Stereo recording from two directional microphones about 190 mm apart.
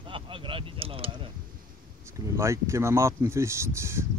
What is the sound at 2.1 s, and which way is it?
Speech, 15° right (ahead or behind).